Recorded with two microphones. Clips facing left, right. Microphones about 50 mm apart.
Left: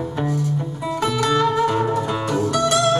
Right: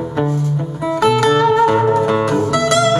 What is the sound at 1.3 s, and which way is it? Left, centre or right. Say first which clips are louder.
Music: right 6 dB; right.